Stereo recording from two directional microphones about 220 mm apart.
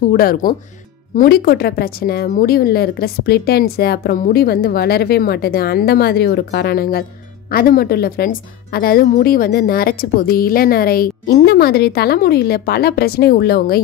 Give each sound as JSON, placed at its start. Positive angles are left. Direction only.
{"t": 0.1, "sound": "a woman's voice", "side_deg": 40}